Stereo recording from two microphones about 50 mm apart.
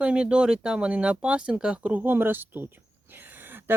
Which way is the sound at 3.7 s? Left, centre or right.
Right.